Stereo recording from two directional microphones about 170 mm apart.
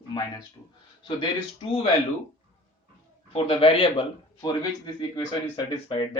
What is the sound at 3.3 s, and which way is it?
Speech, 30° left (ahead or behind).